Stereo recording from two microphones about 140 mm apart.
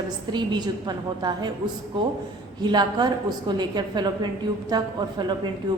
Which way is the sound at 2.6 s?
30° right (ahead or behind).